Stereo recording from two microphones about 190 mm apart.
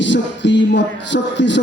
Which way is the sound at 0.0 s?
70° left (ahead or behind).